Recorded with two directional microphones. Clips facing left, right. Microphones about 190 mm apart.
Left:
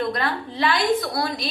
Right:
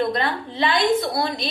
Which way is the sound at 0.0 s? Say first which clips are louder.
Right 2 dB; 25° right (ahead or behind).